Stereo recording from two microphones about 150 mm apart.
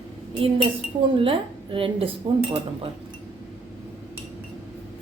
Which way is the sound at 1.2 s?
35° right (ahead or behind).